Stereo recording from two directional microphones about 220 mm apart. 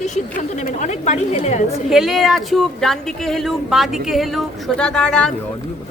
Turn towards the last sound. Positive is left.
turn(degrees=5)  # may be behind; listen again after turning